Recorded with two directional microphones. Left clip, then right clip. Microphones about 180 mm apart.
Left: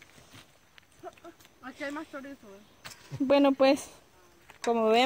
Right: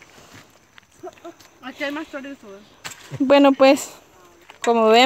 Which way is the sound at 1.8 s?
10° right (ahead or behind).